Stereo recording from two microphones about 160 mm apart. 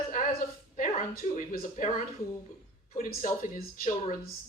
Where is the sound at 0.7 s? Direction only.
55° left (ahead or behind).